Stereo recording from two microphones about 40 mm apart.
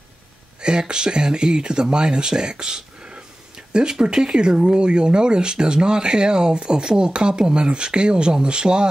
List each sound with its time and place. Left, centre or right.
0.6 s speech: right